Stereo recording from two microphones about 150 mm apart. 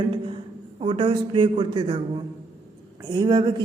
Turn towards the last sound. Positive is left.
turn(degrees=-30)  # may be behind; listen again after turning